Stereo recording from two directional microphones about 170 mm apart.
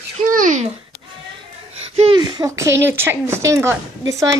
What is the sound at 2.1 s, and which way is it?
Speech, 25° right (ahead or behind).